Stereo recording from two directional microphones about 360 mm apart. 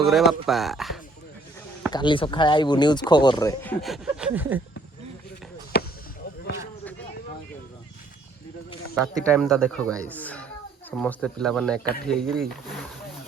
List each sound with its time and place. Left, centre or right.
0.0 s speech: centre
1.9 s speech: centre
5.7 s basketball bounce: left
9.2 s speech: centre